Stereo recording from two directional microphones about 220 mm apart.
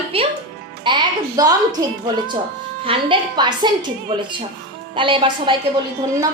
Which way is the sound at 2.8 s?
20° right (ahead or behind).